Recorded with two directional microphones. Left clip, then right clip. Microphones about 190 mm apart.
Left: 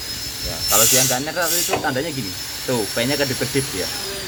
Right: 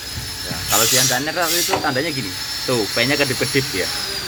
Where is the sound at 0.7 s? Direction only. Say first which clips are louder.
Right 1 dB; centre (ahead or behind).